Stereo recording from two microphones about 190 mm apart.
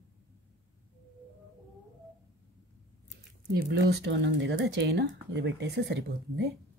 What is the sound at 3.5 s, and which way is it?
Speech, 60° right (ahead or behind).